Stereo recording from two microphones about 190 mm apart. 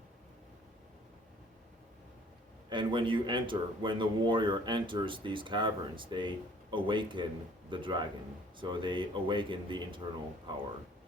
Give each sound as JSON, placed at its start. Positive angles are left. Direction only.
{"t": 2.6, "sound": "speech", "side_deg": -25}